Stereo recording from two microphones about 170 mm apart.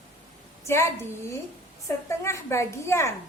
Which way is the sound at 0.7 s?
15° left (ahead or behind).